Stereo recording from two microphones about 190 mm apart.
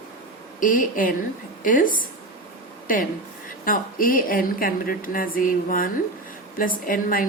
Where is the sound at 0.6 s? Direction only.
45° left (ahead or behind).